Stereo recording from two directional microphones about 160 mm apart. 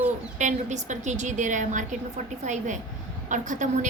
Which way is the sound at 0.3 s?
50° right (ahead or behind).